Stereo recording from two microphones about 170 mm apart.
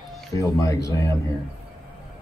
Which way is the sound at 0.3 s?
20° left (ahead or behind).